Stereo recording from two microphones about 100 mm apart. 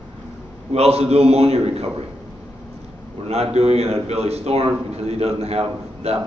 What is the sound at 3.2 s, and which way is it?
A man's voice, 90° right.